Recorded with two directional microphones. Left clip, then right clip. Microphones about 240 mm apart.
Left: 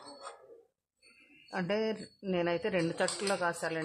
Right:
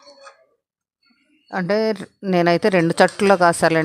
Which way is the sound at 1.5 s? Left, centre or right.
Right.